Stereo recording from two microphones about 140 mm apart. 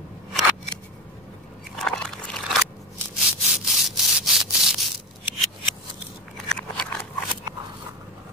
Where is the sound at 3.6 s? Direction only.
Centre (ahead or behind).